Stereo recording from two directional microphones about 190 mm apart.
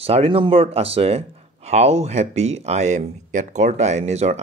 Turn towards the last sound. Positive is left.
turn(degrees=-35)  # may be behind; listen again after turning